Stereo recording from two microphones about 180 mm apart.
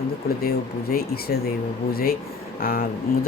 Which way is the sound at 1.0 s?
60° left (ahead or behind).